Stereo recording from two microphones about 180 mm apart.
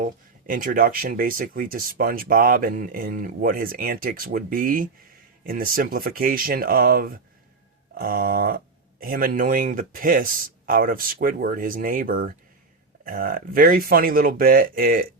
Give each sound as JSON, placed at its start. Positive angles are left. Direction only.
{"t": 0.0, "sound": "speech", "side_deg": -50}